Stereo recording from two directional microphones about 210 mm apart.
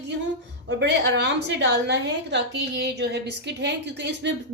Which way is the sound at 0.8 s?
55° right (ahead or behind).